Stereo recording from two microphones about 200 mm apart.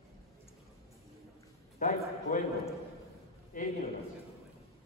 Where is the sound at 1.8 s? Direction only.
40° left (ahead or behind).